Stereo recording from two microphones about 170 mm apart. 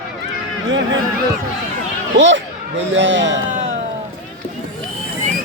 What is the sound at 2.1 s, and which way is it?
Speech, 90° right.